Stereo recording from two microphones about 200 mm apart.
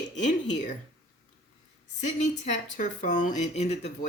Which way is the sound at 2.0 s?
35° left (ahead or behind).